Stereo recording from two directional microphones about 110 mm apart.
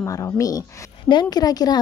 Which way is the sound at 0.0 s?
30° left (ahead or behind).